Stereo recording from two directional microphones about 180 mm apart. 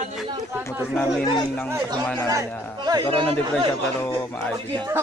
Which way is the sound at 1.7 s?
20° right (ahead or behind).